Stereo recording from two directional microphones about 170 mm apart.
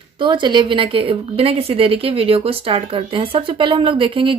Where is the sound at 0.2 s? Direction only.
30° right (ahead or behind).